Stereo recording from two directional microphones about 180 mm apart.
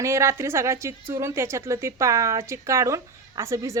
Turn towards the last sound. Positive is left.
turn(degrees=-15)  # may be behind; listen again after turning